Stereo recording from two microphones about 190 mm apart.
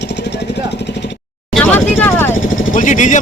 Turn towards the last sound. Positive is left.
turn(degrees=40)  # may be behind; listen again after turning